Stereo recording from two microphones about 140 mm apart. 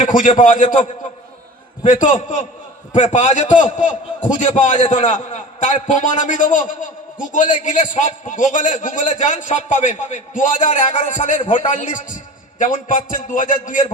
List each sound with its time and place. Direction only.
0.0 s a man's voice: 70° left (ahead or behind)